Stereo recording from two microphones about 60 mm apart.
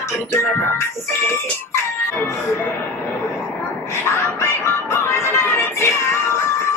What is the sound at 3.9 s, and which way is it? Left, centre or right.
Music, left.